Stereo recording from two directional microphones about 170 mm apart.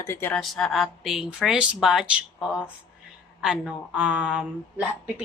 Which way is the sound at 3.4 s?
5° right (ahead or behind).